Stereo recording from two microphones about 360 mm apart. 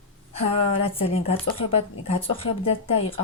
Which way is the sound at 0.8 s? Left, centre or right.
Centre.